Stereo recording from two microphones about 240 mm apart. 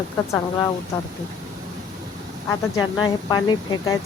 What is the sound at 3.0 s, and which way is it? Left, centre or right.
Speech, centre.